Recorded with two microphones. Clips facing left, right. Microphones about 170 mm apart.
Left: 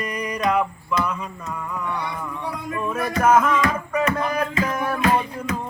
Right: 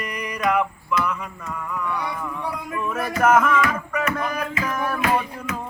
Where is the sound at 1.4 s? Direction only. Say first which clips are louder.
Right 1 dB; 15° left (ahead or behind).